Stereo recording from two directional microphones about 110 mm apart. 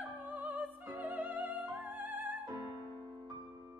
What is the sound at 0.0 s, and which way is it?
Music, 15° right (ahead or behind).